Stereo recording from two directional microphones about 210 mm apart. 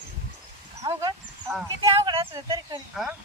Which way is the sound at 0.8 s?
20° right (ahead or behind).